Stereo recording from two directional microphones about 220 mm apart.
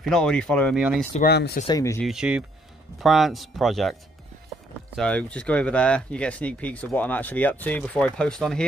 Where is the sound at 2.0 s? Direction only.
5° right (ahead or behind).